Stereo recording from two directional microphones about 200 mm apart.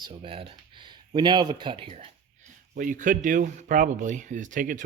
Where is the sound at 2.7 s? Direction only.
40° right (ahead or behind).